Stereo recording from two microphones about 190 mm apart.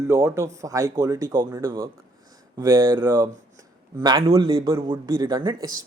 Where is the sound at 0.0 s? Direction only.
15° right (ahead or behind).